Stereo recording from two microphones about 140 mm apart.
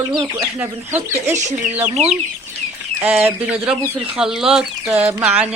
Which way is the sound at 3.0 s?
10° right (ahead or behind).